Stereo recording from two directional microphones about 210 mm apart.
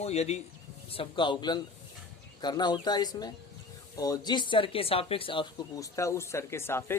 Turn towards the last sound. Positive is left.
turn(degrees=10)  # may be behind; listen again after turning